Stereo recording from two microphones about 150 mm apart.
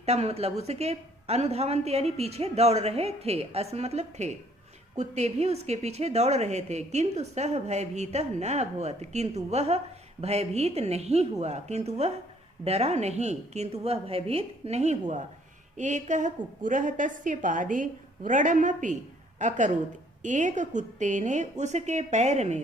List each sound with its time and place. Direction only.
0.0 s a woman's voice: 45° right (ahead or behind)